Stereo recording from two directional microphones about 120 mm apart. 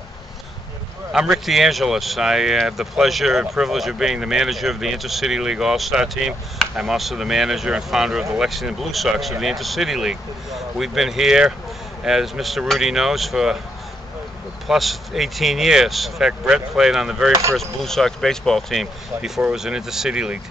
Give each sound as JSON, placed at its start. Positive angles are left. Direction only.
{"t": 1.1, "sound": "speech", "side_deg": -5}
{"t": 14.7, "sound": "speech", "side_deg": 0}
{"t": 17.3, "sound": "speech", "side_deg": -25}
{"t": 17.6, "sound": "speech", "side_deg": 5}